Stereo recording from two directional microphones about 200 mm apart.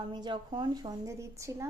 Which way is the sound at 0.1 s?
20° right (ahead or behind).